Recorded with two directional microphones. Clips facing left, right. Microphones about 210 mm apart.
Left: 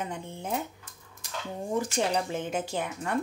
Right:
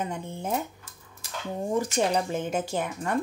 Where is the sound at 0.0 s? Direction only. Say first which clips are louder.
Right 3 dB; 45° right (ahead or behind).